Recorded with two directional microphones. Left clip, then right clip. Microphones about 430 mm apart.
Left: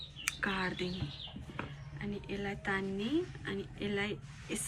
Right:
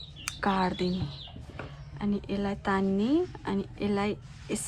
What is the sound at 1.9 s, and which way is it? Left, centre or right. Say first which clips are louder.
A woman's voice: right 8 dB; centre.